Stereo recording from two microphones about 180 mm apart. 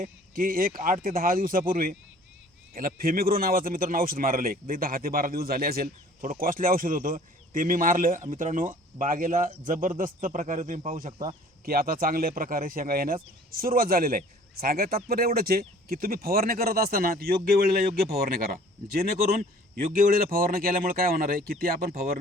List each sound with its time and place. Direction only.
0.0 s a man's voice: 50° right (ahead or behind)